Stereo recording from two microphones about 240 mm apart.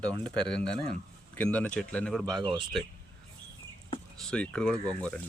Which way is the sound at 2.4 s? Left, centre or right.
Right.